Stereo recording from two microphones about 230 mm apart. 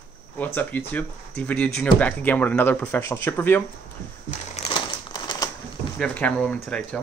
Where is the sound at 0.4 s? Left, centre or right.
Centre.